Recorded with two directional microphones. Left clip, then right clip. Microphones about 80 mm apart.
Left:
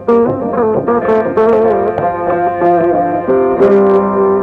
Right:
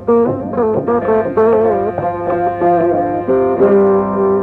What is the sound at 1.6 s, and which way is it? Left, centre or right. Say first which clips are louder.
Music: left 3 dB; right.